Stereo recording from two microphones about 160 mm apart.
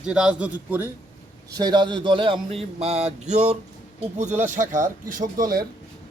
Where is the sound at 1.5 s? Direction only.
25° right (ahead or behind).